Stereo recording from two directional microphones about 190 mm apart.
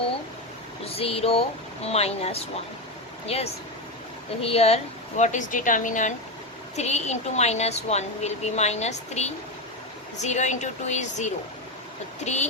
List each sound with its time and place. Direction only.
0.9 s speech: 30° left (ahead or behind)